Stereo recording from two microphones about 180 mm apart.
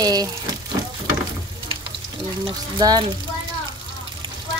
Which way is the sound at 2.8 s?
25° right (ahead or behind).